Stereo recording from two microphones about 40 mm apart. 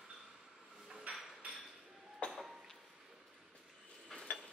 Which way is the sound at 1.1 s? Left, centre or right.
Right.